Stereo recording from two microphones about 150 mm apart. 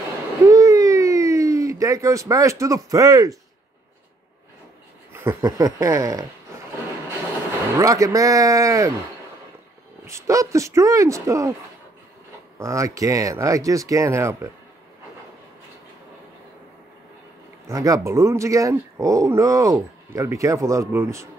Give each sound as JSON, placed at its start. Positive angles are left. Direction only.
{"t": 0.5, "sound": "a sound", "side_deg": -20}
{"t": 5.1, "sound": "speech", "side_deg": -15}
{"t": 7.8, "sound": "speech", "side_deg": -20}
{"t": 10.0, "sound": "speech", "side_deg": -20}
{"t": 12.5, "sound": "speech", "side_deg": -20}
{"t": 17.6, "sound": "speech", "side_deg": -25}